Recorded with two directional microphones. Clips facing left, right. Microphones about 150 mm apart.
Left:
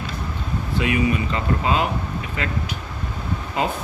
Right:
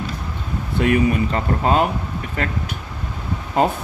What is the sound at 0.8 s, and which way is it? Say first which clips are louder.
Speech: right 4 dB; 50° right (ahead or behind).